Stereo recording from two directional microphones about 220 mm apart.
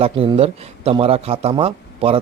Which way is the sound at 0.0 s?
25° right (ahead or behind).